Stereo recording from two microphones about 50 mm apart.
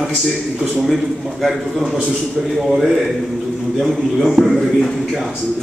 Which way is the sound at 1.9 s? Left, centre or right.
Centre.